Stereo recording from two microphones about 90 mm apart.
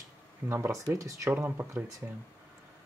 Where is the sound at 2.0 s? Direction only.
15° right (ahead or behind).